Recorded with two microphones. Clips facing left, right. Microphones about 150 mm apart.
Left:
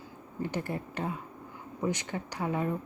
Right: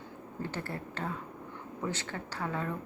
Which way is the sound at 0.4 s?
15° left (ahead or behind).